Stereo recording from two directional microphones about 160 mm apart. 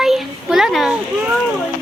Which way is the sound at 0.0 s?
5° right (ahead or behind).